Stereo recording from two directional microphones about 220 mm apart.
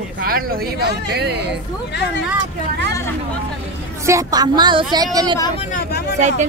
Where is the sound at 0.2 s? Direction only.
40° right (ahead or behind).